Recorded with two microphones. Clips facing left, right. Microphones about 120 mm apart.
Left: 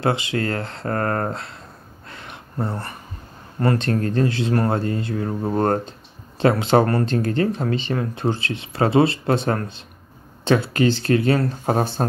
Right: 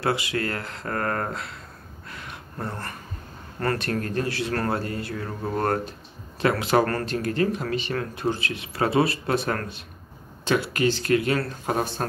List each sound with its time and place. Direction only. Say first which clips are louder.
0.0 s speech: left 4 dB; 25° left (ahead or behind)
2.0 s a sound: left 1 dB; 25° left (ahead or behind)
3.6 s speech: left 5 dB; 25° left (ahead or behind)